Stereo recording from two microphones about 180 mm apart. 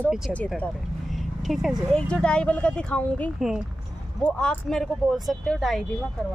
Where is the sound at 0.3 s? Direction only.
5° right (ahead or behind).